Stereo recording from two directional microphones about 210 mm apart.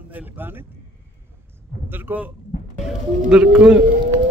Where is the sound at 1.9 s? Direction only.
10° right (ahead or behind).